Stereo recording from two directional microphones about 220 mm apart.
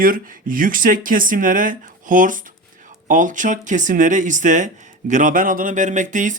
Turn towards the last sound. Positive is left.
turn(degrees=-35)  # may be behind; listen again after turning